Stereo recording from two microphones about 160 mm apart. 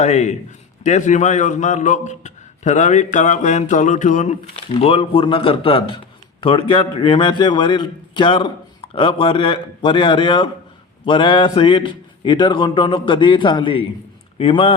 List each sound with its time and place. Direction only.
0.0 s a man's voice: 45° left (ahead or behind)
4.5 s a man's voice: 35° left (ahead or behind)